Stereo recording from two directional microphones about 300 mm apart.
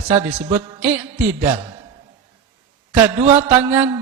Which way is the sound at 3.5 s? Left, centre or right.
Centre.